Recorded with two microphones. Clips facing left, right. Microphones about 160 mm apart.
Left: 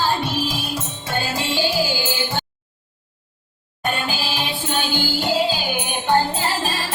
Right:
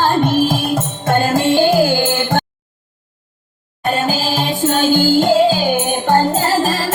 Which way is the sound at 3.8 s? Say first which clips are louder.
Right 7 dB; 40° right (ahead or behind).